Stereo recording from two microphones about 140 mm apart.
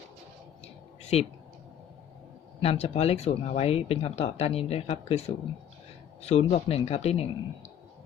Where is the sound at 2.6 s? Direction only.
45° left (ahead or behind).